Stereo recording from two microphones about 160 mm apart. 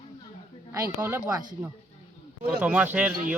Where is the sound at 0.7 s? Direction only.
15° right (ahead or behind).